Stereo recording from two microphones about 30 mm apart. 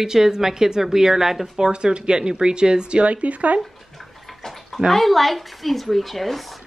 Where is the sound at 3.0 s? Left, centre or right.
Right.